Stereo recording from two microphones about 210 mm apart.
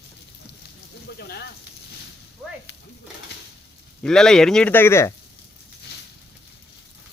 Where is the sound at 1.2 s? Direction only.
50° left (ahead or behind).